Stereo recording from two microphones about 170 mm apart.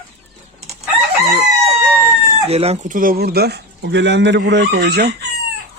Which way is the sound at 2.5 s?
40° right (ahead or behind).